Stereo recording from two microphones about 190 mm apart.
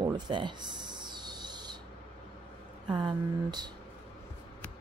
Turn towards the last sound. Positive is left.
turn(degrees=-20)  # may be behind; listen again after turning